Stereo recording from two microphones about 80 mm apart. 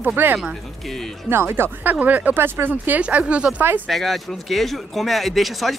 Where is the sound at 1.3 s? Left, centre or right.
Right.